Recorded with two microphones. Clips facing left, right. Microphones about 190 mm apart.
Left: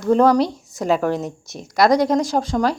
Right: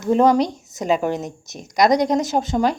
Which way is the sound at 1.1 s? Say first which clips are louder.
Left 2 dB; centre (ahead or behind).